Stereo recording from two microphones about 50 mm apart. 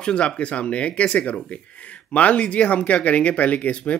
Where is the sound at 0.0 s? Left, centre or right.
Left.